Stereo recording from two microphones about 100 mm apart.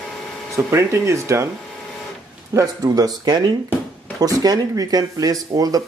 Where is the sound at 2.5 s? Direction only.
40° right (ahead or behind).